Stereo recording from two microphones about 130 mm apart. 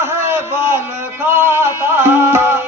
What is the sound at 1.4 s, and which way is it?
Music, 20° right (ahead or behind).